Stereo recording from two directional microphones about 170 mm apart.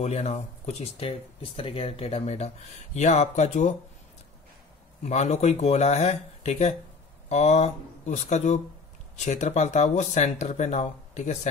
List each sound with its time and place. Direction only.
0.0 s speech: 40° left (ahead or behind)
5.0 s speech: 40° left (ahead or behind)